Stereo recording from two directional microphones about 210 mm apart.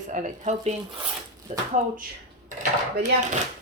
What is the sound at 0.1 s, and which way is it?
A woman's voice, 35° right (ahead or behind).